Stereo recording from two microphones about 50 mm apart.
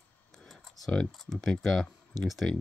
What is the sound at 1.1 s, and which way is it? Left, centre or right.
Speech, centre.